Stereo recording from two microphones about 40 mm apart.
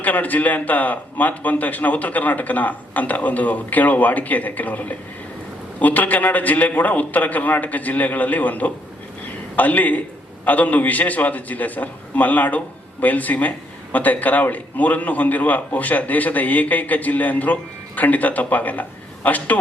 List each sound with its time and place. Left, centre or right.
0.0 s a man's voice: left